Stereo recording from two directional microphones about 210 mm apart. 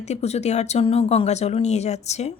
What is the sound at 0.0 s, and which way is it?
Speech, 30° left (ahead or behind).